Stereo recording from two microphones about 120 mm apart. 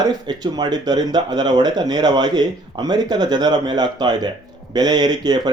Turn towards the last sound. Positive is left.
turn(degrees=-35)  # may be behind; listen again after turning